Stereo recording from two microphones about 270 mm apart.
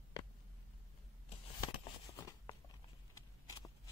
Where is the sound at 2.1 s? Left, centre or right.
Centre.